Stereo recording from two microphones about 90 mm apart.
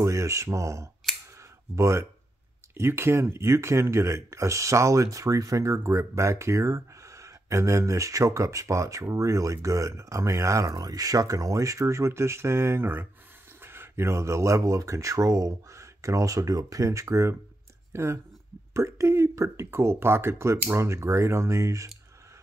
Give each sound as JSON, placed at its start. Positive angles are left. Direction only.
{"t": 0.0, "sound": "speech", "side_deg": -35}
{"t": 1.1, "sound": "scissors", "side_deg": 5}
{"t": 1.8, "sound": "speech", "side_deg": -30}